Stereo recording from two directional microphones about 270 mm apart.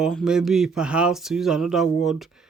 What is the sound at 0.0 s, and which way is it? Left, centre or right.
Speech, centre.